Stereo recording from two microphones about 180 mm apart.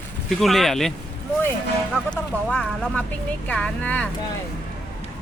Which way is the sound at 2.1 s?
5° left (ahead or behind).